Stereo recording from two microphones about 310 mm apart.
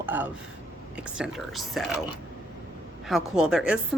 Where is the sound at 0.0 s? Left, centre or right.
Centre.